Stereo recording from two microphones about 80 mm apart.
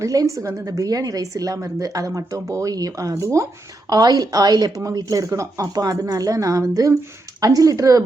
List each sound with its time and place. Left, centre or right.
0.0 s a woman's voice: right
3.9 s a woman's voice: right